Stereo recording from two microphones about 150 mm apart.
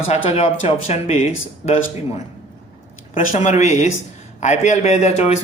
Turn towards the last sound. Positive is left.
turn(degrees=45)  # may be behind; listen again after turning